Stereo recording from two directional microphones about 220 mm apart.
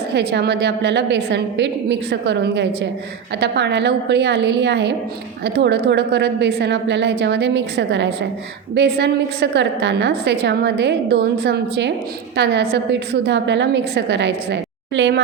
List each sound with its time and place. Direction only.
0.1 s a woman's voice: 50° right (ahead or behind)